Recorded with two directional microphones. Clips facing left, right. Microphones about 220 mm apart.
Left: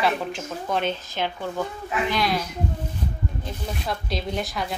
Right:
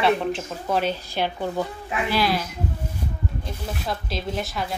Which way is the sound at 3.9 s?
Centre (ahead or behind).